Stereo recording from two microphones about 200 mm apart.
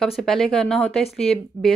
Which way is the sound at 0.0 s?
Centre (ahead or behind).